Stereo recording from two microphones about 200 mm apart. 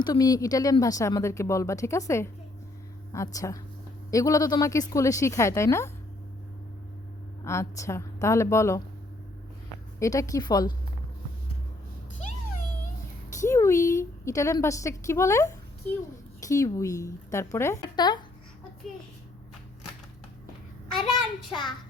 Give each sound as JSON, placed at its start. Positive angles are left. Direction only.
{"t": 0.0, "sound": "speech", "side_deg": 20}
{"t": 7.4, "sound": "speech", "side_deg": 15}
{"t": 10.0, "sound": "a woman's voice", "side_deg": 15}
{"t": 13.3, "sound": "a woman's voice", "side_deg": 15}